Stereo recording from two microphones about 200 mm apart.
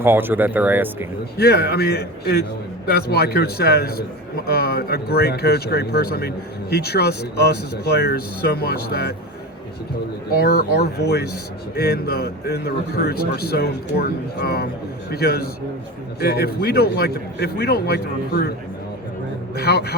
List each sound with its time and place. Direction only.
0.0 s speech: 10° right (ahead or behind)
1.4 s speech: 55° left (ahead or behind)
10.3 s speech: 50° left (ahead or behind)
19.5 s speech: 55° left (ahead or behind)